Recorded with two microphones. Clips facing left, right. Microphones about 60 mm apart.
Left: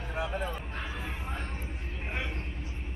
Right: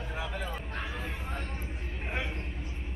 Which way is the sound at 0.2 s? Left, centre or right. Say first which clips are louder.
Left 5 dB; left.